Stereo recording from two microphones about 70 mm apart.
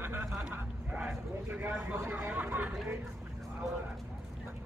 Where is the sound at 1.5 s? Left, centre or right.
Right.